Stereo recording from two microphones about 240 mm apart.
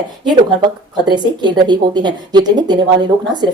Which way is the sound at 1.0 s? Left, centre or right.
Centre.